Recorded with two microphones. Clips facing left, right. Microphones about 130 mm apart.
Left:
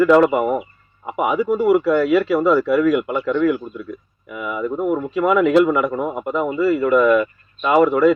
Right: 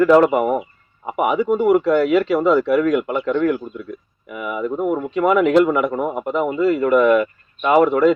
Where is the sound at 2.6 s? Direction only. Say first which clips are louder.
Even; centre (ahead or behind).